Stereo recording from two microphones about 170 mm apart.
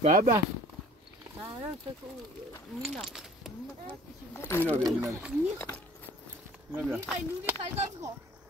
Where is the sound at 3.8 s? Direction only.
15° left (ahead or behind).